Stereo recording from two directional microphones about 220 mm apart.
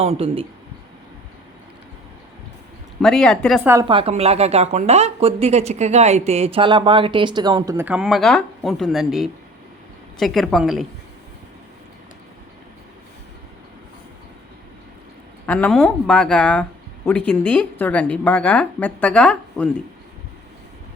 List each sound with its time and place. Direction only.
0.0 s a woman's voice: 25° right (ahead or behind)
3.0 s speech: centre (ahead or behind)
3.7 s a woman's voice: 20° right (ahead or behind); by 10.8 s centre (ahead or behind)
15.4 s a woman's voice: 5° left (ahead or behind)